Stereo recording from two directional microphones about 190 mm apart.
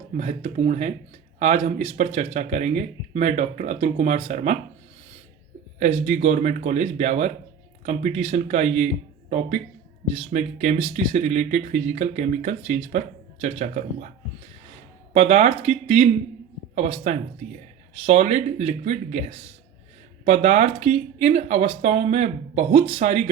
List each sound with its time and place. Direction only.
0.2 s speech: 35° right (ahead or behind)
5.8 s speech: 35° right (ahead or behind)
10.1 s speech: 35° right (ahead or behind)
15.1 s speech: 35° right (ahead or behind)
20.2 s speech: 35° right (ahead or behind)